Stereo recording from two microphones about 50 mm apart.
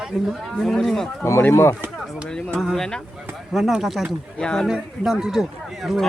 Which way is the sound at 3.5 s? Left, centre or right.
Centre.